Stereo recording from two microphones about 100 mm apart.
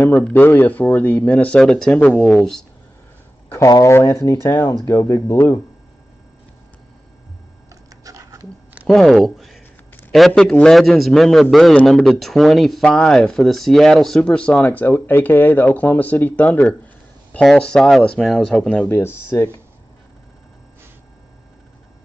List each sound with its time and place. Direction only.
0.0 s speech: 20° left (ahead or behind)
1.6 s speech: centre (ahead or behind)
3.4 s speech: 35° left (ahead or behind)
7.9 s a sound: 35° right (ahead or behind)
8.8 s speech: centre (ahead or behind)
16.4 s speech: 5° left (ahead or behind)
18.9 s speech: 25° left (ahead or behind)